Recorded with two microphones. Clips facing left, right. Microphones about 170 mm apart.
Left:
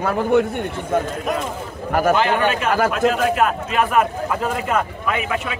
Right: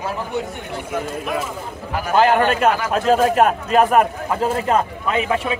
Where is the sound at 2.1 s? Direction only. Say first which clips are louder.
Right 3 dB; 45° right (ahead or behind); by 5.6 s 30° right (ahead or behind).